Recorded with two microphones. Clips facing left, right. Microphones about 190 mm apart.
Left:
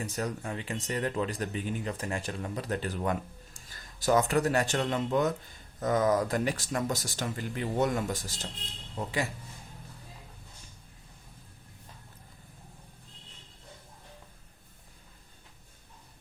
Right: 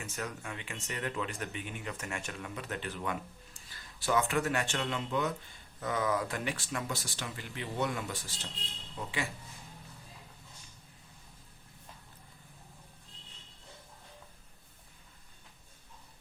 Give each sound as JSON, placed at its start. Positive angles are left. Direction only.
{"t": 0.0, "sound": "speech", "side_deg": 35}